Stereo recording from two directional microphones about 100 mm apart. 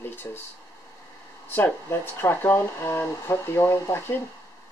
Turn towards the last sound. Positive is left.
turn(degrees=25)  # may be behind; listen again after turning